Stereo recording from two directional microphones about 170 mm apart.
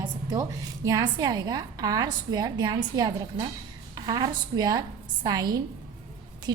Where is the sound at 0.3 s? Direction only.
20° right (ahead or behind).